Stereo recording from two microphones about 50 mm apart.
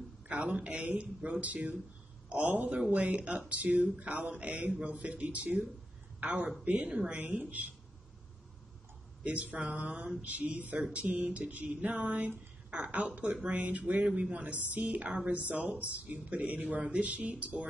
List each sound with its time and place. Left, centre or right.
0.3 s a man's voice: right
9.2 s speech: right
11.9 s speech: right